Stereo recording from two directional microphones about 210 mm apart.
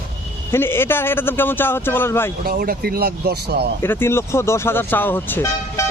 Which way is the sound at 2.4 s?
45° right (ahead or behind).